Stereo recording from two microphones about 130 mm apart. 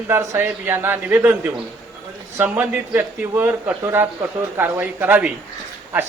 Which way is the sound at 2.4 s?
15° right (ahead or behind).